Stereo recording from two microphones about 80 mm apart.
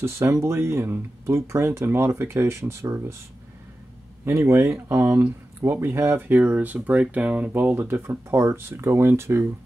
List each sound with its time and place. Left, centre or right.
0.0 s speech: right
4.2 s speech: right
7.8 s speech: right